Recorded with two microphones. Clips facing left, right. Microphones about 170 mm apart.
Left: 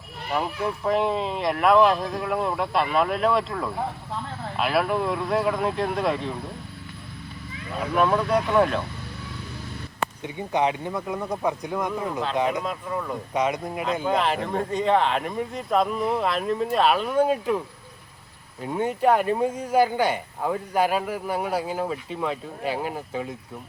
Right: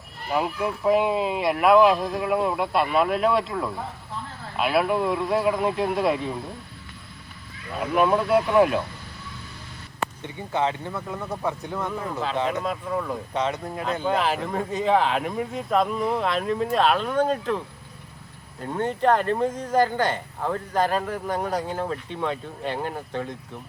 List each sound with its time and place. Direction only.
0.3 s speech: 5° right (ahead or behind)
7.8 s speech: 5° right (ahead or behind)
10.2 s speech: 15° left (ahead or behind)
12.6 s speech: centre (ahead or behind)
13.3 s speech: 10° left (ahead or behind)
14.1 s speech: centre (ahead or behind)
18.6 s speech: 10° left (ahead or behind)